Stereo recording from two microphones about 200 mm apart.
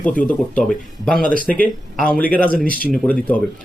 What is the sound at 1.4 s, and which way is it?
Speech, 5° left (ahead or behind).